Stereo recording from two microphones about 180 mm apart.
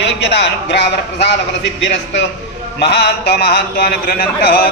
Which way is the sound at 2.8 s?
65° left (ahead or behind).